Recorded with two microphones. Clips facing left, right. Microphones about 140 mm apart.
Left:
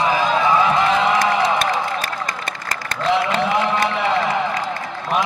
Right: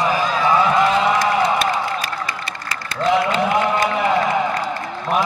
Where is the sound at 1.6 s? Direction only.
50° left (ahead or behind).